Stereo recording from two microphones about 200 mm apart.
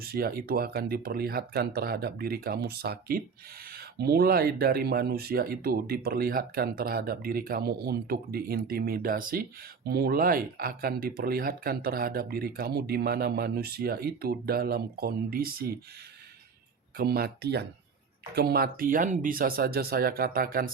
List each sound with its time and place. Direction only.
0.0 s speech: 50° right (ahead or behind)
17.0 s speech: 50° right (ahead or behind)